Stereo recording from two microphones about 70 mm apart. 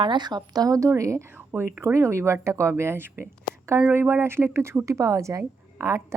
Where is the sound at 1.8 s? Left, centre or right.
Right.